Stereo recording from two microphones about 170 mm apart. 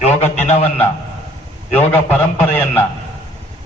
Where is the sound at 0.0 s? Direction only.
40° left (ahead or behind).